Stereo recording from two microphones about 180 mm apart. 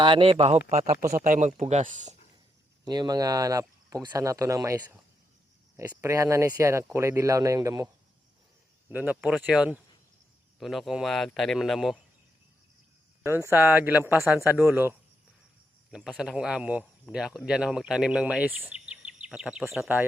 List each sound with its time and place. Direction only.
0.0 s speech: 30° right (ahead or behind)
2.8 s speech: 20° right (ahead or behind)
8.9 s speech: 10° right (ahead or behind)
13.2 s speech: 15° right (ahead or behind)